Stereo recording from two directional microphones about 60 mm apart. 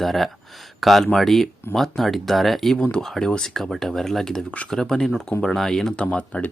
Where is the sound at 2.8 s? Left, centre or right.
Centre.